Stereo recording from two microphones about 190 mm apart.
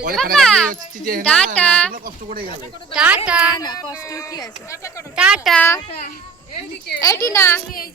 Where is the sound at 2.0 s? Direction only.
50° right (ahead or behind).